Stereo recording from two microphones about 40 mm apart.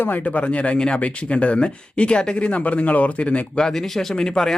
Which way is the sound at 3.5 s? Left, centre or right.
Centre.